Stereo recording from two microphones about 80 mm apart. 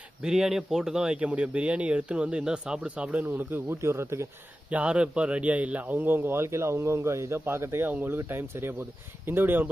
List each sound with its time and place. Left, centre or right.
0.2 s speech: centre; by 4.3 s right
4.7 s a man's voice: centre